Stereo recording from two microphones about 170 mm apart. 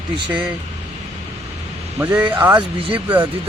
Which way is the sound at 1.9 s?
10° right (ahead or behind).